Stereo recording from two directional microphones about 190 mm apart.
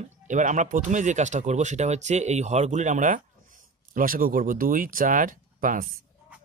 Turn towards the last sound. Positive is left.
turn(degrees=-45)  # may be behind; listen again after turning